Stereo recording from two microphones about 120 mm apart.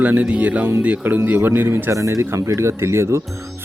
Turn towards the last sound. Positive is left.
turn(degrees=-25)  # may be behind; listen again after turning